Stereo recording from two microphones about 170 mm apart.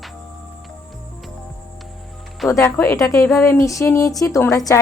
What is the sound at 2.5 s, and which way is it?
A woman's voice, 15° left (ahead or behind).